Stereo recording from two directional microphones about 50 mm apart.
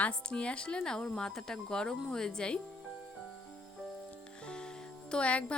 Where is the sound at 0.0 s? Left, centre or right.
Left.